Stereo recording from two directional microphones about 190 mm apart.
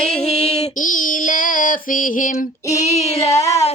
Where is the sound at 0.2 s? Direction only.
35° left (ahead or behind).